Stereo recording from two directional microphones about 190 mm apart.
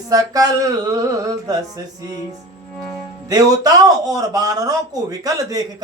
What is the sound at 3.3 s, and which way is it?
Speech, 20° right (ahead or behind).